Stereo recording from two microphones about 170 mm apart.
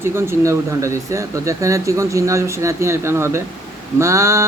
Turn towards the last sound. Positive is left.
turn(degrees=-15)  # may be behind; listen again after turning